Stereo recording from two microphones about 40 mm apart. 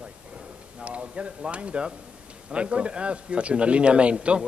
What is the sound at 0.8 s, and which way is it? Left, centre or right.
A man's voice, right.